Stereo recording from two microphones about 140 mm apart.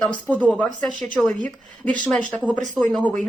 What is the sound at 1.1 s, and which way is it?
A woman's voice, 10° left (ahead or behind).